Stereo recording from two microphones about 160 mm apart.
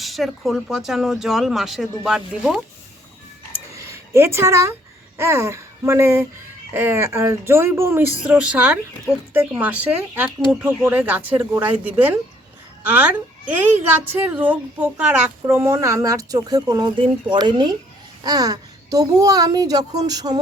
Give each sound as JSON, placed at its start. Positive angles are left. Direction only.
{"t": 0.0, "sound": "speech", "side_deg": 0}
{"t": 3.7, "sound": "a sound", "side_deg": -20}
{"t": 5.1, "sound": "a woman's voice", "side_deg": -15}
{"t": 13.6, "sound": "a woman's voice", "side_deg": -10}